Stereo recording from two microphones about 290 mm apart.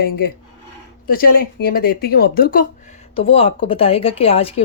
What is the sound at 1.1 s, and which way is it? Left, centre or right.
Speech, left.